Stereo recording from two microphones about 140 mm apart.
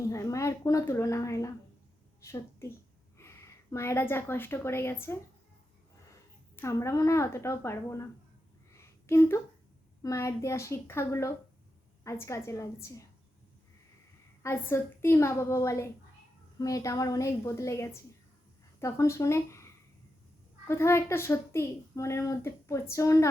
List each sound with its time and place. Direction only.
0.1 s a child's voice: 20° left (ahead or behind)
6.6 s a child's voice: 20° left (ahead or behind)
8.7 s a sound: 20° left (ahead or behind)
10.0 s a child's voice: 20° left (ahead or behind)
14.4 s a child's voice: 20° left (ahead or behind)
20.7 s a child's voice: 20° left (ahead or behind)